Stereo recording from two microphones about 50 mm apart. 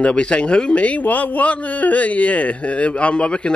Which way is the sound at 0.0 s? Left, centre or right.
Left.